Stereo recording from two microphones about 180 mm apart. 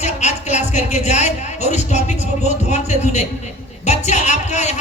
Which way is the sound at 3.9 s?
40° left (ahead or behind).